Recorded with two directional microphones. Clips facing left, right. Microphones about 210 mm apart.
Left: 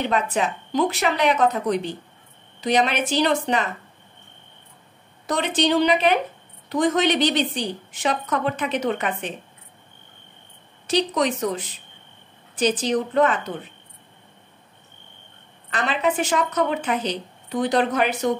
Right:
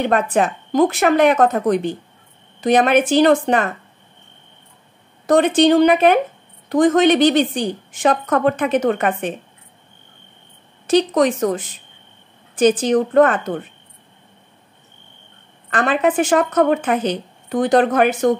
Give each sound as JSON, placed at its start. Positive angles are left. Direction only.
{"t": 0.1, "sound": "speech", "side_deg": -50}
{"t": 5.2, "sound": "speech", "side_deg": -50}
{"t": 10.9, "sound": "speech", "side_deg": -50}
{"t": 15.7, "sound": "speech", "side_deg": -50}